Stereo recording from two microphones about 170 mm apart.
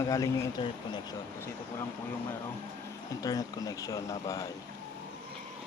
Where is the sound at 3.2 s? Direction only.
20° left (ahead or behind).